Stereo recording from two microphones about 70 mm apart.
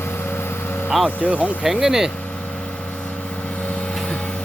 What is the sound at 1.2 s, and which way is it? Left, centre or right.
Speech, centre.